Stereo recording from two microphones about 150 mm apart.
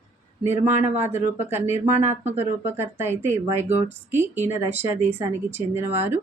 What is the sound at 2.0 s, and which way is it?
Speech, 50° right (ahead or behind).